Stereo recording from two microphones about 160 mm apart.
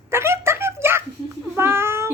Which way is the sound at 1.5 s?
15° right (ahead or behind).